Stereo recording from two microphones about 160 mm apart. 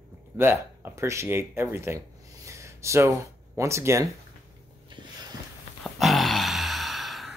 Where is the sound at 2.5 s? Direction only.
20° right (ahead or behind).